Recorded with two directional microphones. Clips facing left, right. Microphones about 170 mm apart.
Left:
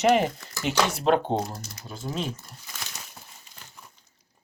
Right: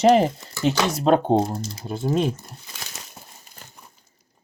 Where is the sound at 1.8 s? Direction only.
55° right (ahead or behind).